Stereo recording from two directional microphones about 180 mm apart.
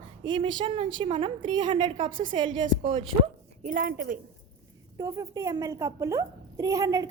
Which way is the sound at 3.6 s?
50° right (ahead or behind).